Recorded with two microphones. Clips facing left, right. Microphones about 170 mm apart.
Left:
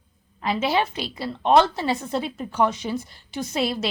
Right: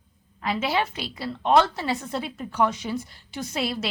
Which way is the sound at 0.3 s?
25° left (ahead or behind).